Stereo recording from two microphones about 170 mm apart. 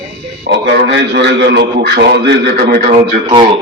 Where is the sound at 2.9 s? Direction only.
30° right (ahead or behind).